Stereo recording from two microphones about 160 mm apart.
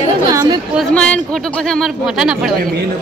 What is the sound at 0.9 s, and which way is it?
A woman's voice, 5° left (ahead or behind).